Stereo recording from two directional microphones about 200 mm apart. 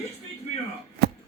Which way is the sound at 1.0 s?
55° right (ahead or behind).